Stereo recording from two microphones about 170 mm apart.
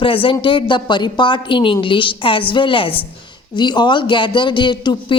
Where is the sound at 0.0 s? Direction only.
30° left (ahead or behind).